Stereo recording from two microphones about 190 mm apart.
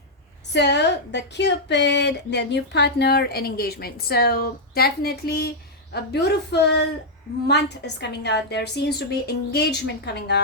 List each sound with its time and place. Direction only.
0.5 s a woman's voice: 65° left (ahead or behind)